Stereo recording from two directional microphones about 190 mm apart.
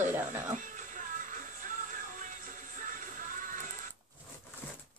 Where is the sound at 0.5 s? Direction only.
45° right (ahead or behind).